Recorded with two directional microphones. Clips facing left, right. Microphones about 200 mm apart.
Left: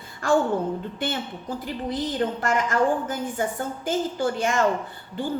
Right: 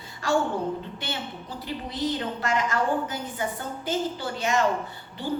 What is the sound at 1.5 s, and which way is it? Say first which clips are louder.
A woman's voice: left 7 dB; 50° left (ahead or behind).